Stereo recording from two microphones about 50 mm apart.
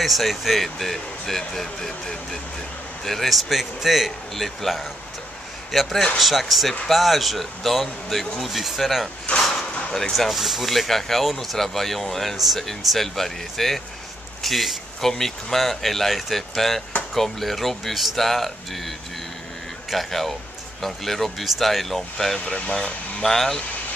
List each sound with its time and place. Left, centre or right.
0.0 s speech: centre
22.5 s speech: left
23.2 s speech: centre